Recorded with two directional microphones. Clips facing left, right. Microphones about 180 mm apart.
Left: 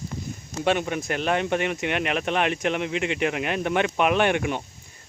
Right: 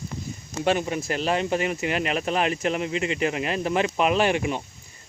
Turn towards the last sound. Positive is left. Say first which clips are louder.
# even
turn(degrees=0)  # may be behind; listen again after turning